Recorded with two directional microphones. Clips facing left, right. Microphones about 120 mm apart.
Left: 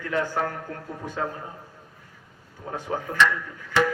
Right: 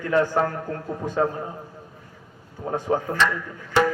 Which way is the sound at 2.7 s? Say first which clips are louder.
Right 6 dB; 35° right (ahead or behind).